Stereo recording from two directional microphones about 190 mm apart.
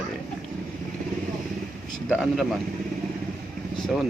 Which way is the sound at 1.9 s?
Centre (ahead or behind).